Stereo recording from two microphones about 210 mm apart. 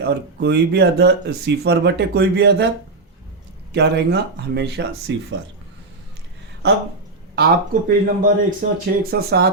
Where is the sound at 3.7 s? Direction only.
50° right (ahead or behind).